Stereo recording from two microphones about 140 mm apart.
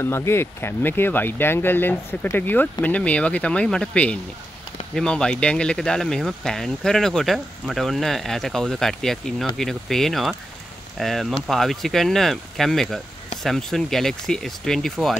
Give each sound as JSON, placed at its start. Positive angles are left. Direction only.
{"t": 0.0, "sound": "speech", "side_deg": 20}